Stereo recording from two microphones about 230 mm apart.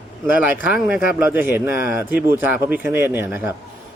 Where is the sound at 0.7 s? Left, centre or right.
Centre.